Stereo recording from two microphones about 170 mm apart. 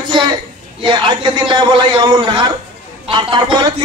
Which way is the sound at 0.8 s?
25° right (ahead or behind).